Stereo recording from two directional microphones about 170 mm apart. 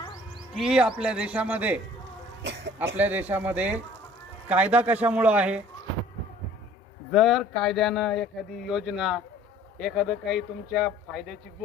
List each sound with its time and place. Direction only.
0.5 s speech: 5° right (ahead or behind)
2.4 s sheep: 90° right
3.0 s speech: 10° right (ahead or behind)
7.1 s speech: centre (ahead or behind)